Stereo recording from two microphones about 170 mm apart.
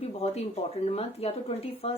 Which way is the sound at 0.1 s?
40° left (ahead or behind).